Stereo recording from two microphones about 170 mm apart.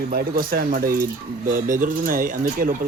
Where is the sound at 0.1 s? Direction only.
60° right (ahead or behind).